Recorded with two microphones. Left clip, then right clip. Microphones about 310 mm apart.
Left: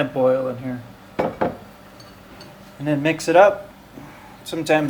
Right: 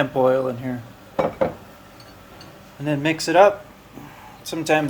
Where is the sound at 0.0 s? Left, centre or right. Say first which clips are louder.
Even; right.